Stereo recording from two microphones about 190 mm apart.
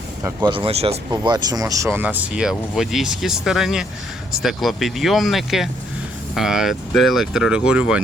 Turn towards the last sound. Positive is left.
turn(degrees=-5)  # may be behind; listen again after turning